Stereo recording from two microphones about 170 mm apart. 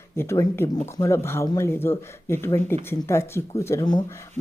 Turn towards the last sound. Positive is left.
turn(degrees=25)  # may be behind; listen again after turning